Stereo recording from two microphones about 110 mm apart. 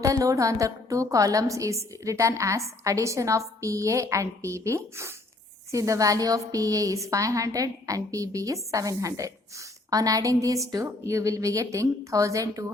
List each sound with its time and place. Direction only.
0.0 s a woman's voice: 30° right (ahead or behind)